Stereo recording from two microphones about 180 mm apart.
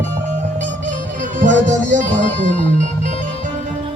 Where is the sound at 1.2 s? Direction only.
45° right (ahead or behind).